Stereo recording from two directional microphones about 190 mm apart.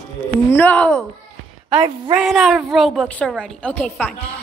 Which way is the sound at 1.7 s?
25° right (ahead or behind).